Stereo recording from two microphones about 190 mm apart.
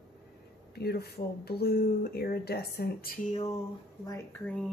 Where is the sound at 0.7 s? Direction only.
55° left (ahead or behind).